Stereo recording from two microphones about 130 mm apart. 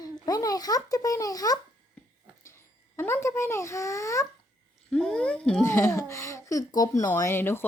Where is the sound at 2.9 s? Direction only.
20° left (ahead or behind).